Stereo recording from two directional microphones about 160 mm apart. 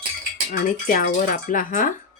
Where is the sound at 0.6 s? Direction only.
55° left (ahead or behind).